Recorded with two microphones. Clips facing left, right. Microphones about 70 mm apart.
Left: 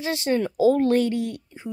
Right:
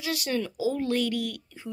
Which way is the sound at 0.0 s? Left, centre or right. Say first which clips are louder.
Left 6 dB; left.